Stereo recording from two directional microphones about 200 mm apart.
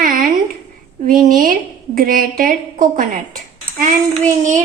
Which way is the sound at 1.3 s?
45° right (ahead or behind).